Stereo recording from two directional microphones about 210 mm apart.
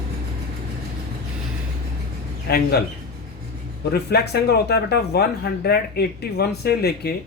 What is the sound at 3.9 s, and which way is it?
Speech, 50° left (ahead or behind).